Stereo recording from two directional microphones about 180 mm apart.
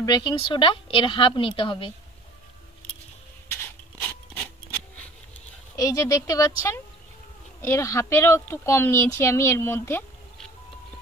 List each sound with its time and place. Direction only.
0.0 s a woman's voice: 20° left (ahead or behind)
5.8 s a woman's voice: 20° left (ahead or behind)